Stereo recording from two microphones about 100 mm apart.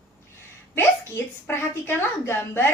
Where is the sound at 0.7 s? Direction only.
25° left (ahead or behind).